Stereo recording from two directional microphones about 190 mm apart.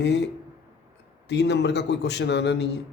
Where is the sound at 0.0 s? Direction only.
65° left (ahead or behind).